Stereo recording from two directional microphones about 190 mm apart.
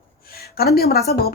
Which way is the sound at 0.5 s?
55° left (ahead or behind).